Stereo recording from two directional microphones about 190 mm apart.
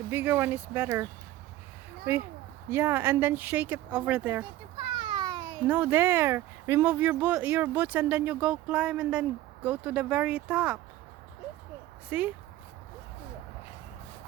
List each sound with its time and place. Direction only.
0.1 s speech: 10° right (ahead or behind)
2.1 s speech: 15° right (ahead or behind)
4.8 s a sound: 25° right (ahead or behind)
5.6 s speech: 10° right (ahead or behind)
12.0 s speech: 5° right (ahead or behind)